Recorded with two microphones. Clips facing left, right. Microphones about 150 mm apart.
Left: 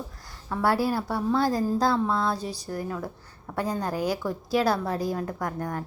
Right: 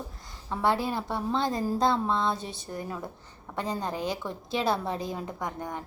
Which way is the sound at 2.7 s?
15° right (ahead or behind).